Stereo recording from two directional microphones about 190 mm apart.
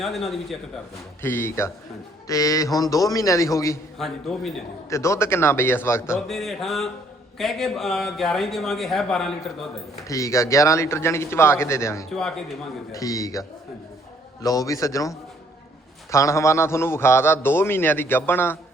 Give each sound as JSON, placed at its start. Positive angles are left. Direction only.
{"t": 0.0, "sound": "a man's voice", "side_deg": 0}
{"t": 1.2, "sound": "a man's voice", "side_deg": 10}
{"t": 3.9, "sound": "a man's voice", "side_deg": 0}
{"t": 4.9, "sound": "a man's voice", "side_deg": 15}
{"t": 6.2, "sound": "a man's voice", "side_deg": 0}
{"t": 10.1, "sound": "a man's voice", "side_deg": 15}
{"t": 14.4, "sound": "a man's voice", "side_deg": 20}
{"t": 16.1, "sound": "a man's voice", "side_deg": 15}